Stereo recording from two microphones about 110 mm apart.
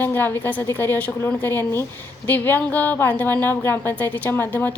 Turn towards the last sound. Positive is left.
turn(degrees=15)  # may be behind; listen again after turning